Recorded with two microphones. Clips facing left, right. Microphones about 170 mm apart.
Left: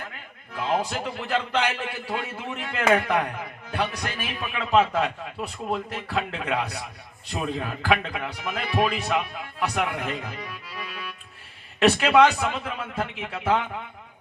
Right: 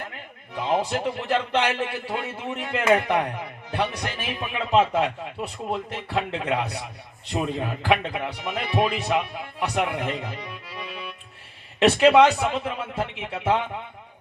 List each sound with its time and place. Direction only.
0.5 s a man's voice: 20° right (ahead or behind)